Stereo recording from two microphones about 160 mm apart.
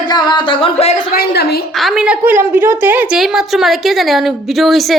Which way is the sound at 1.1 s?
85° left.